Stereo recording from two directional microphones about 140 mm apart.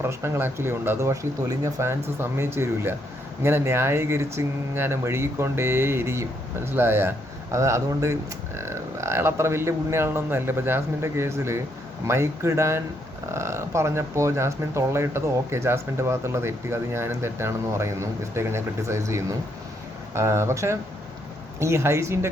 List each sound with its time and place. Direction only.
0.0 s speech: 20° right (ahead or behind)